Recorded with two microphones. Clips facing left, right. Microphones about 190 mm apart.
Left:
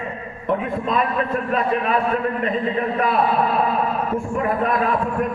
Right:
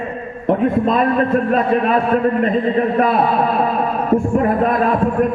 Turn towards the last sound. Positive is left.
turn(degrees=-50)  # may be behind; listen again after turning